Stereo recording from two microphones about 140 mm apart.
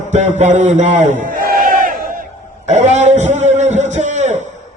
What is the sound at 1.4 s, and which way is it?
Battle cry, 90° right.